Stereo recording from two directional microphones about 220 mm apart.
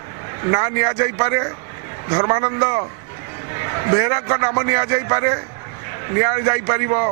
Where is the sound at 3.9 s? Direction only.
15° right (ahead or behind).